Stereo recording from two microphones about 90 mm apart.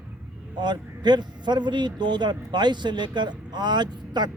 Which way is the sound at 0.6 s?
55° right (ahead or behind).